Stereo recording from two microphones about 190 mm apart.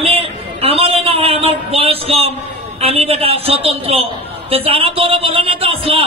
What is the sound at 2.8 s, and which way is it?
A woman's voice, 30° right (ahead or behind).